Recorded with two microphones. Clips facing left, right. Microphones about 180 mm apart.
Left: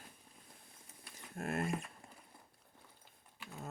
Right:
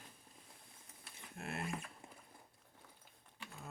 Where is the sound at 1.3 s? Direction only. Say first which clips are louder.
Left 7 dB; 45° left (ahead or behind).